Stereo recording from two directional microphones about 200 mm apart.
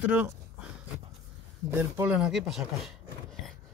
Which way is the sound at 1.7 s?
10° right (ahead or behind).